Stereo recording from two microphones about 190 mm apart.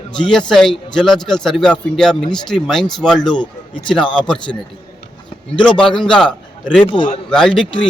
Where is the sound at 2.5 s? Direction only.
Centre (ahead or behind).